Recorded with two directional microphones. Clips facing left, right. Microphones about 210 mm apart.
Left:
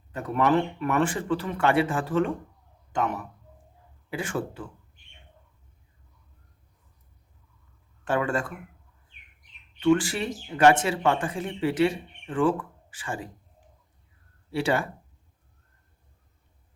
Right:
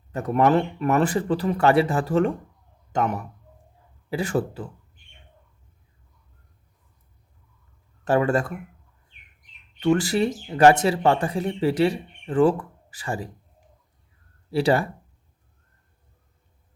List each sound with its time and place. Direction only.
0.1 s a man's voice: 45° right (ahead or behind)
8.0 s speech: 40° right (ahead or behind)
9.8 s speech: 40° right (ahead or behind)
14.5 s speech: 35° right (ahead or behind)